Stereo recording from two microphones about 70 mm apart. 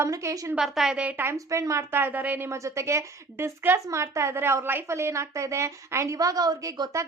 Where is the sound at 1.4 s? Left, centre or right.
Right.